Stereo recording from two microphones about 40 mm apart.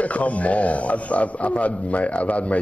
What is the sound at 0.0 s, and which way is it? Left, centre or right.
Speech, left.